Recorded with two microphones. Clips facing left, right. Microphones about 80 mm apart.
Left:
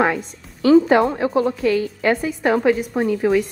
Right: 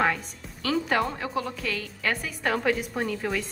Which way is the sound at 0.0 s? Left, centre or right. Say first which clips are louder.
Left 6 dB; left.